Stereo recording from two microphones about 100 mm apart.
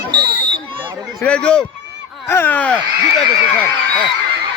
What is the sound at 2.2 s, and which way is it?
Speech, 25° left (ahead or behind).